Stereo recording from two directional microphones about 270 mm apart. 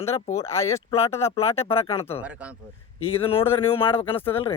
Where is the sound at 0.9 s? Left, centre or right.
Left.